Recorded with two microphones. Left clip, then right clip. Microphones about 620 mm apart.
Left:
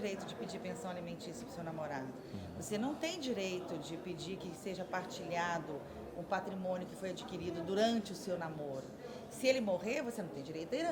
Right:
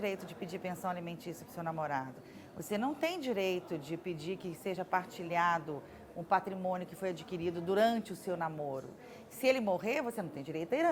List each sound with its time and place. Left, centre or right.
0.0 s speech: right